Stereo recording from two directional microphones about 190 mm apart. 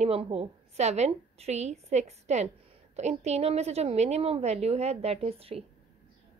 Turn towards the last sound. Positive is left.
turn(degrees=-30)  # may be behind; listen again after turning